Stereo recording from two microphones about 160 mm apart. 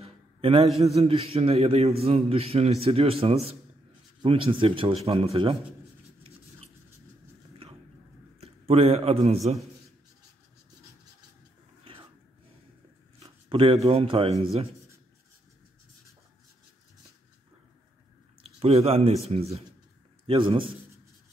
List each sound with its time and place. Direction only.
0.0 s a sound: 35° right (ahead or behind)
0.9 s a man's voice: 35° right (ahead or behind)
8.4 s a man's voice: 40° right (ahead or behind)
13.2 s a sound: 35° right (ahead or behind)
13.8 s a man's voice: 35° right (ahead or behind)
18.4 s a man's voice: 40° right (ahead or behind)